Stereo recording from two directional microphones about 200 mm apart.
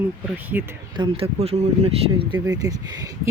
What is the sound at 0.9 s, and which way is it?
Speech, 25° right (ahead or behind).